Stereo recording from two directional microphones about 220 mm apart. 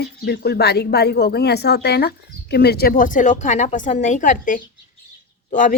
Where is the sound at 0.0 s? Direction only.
45° left (ahead or behind).